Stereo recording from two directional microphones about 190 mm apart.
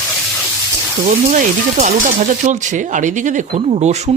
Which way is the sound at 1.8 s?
40° right (ahead or behind).